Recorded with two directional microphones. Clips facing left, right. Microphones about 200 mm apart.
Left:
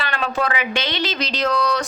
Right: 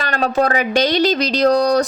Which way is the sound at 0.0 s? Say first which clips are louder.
Right 6 dB; 40° right (ahead or behind).